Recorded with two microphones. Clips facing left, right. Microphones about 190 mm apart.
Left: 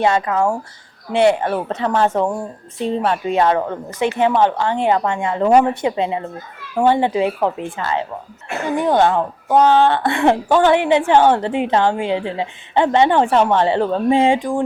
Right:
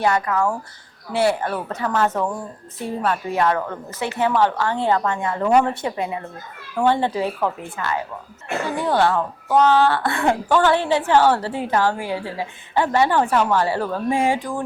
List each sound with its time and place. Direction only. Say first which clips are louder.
0.0 s a woman's voice: left 3 dB; 25° left (ahead or behind)